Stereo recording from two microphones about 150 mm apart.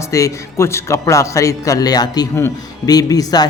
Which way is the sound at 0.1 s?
20° left (ahead or behind).